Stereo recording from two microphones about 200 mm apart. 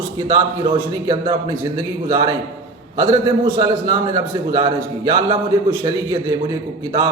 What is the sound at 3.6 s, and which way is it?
A man's voice, 20° right (ahead or behind).